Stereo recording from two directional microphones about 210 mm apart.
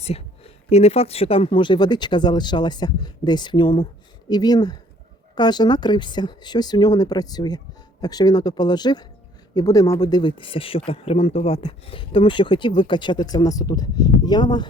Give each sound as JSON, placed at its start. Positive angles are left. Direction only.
{"t": 0.0, "sound": "speech", "side_deg": 30}